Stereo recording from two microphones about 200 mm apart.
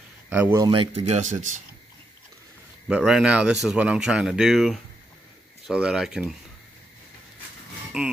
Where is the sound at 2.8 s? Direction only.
5° right (ahead or behind).